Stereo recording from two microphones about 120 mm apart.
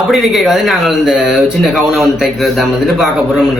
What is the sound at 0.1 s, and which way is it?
A man's voice, centre (ahead or behind).